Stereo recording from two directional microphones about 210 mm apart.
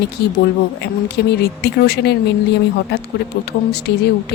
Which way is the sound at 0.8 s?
50° left (ahead or behind).